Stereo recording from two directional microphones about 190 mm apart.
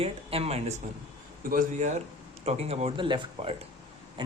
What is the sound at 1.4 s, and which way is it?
A man's voice, 45° right (ahead or behind).